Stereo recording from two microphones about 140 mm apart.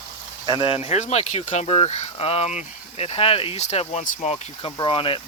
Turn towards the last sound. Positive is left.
turn(degrees=40)  # may be behind; listen again after turning